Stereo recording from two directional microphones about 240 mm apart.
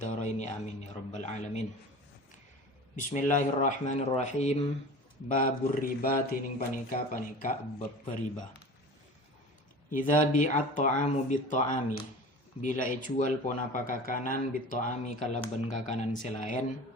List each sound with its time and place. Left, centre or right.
0.0 s speech: left
2.9 s speech: left
9.9 s speech: left